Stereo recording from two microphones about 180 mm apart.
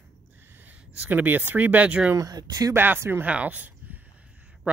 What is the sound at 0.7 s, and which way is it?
Speech, 10° right (ahead or behind).